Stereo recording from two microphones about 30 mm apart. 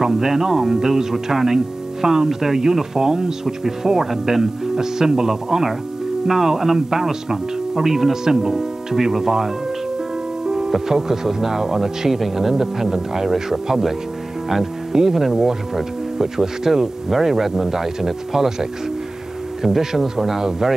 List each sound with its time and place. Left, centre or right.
0.0 s speech: centre
10.9 s speech: centre
14.5 s music: centre
15.0 s speech: centre